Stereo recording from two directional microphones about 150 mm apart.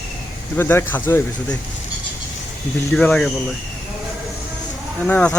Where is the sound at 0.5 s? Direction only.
15° left (ahead or behind).